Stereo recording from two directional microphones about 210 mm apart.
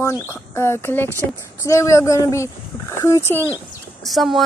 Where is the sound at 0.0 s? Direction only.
10° left (ahead or behind).